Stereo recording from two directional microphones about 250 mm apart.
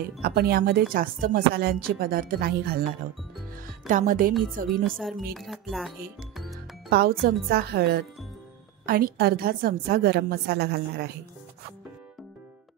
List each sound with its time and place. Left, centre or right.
0.2 s speech: right
4.8 s speech: centre
6.9 s speech: right